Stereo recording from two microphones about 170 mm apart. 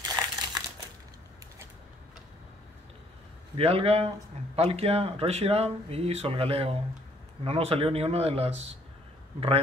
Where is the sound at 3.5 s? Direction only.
35° right (ahead or behind).